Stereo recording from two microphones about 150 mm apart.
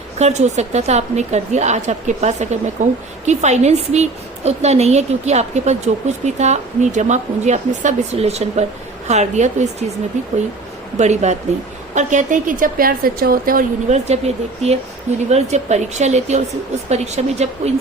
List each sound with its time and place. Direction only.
0.2 s a woman's voice: 50° right (ahead or behind); by 13.7 s 70° right (ahead or behind)
13.8 s a woman's voice: 45° right (ahead or behind)